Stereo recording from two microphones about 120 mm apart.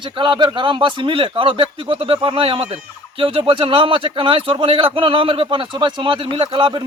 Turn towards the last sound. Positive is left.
turn(degrees=-45)  # may be behind; listen again after turning